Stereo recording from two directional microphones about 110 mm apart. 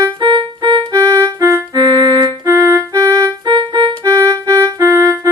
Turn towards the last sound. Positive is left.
turn(degrees=-30)  # may be behind; listen again after turning